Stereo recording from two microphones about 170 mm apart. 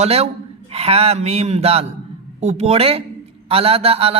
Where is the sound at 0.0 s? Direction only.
40° right (ahead or behind).